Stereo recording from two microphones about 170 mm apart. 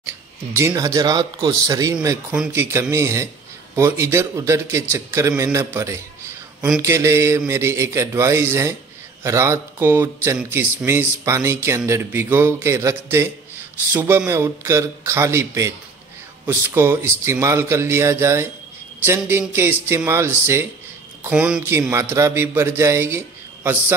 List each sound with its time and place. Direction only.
0.6 s a man's voice: 20° right (ahead or behind)